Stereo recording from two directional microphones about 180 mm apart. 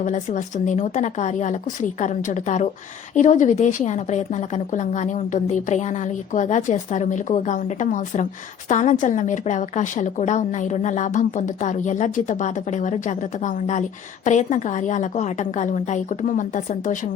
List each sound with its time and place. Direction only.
0.0 s a woman's voice: 45° left (ahead or behind)